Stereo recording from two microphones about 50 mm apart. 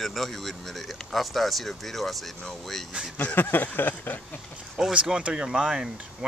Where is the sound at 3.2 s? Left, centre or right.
Left.